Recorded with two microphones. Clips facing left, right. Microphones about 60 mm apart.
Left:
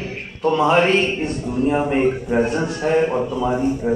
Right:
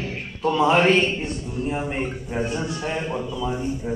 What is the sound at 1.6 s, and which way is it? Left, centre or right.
Speech, left.